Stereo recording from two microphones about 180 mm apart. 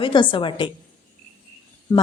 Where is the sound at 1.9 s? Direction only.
25° left (ahead or behind).